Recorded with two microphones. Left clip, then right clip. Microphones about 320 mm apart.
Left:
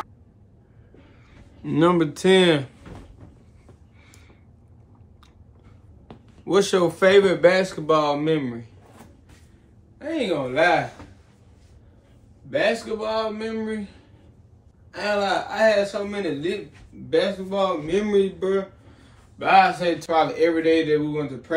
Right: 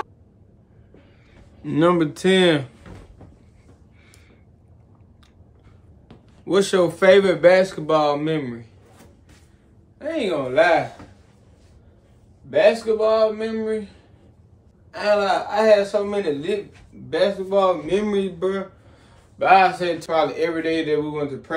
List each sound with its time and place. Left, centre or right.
1.6 s speech: centre
6.1 s a sound: centre
6.4 s speech: centre
9.9 s speech: centre
12.4 s a man's voice: centre
14.9 s a man's voice: centre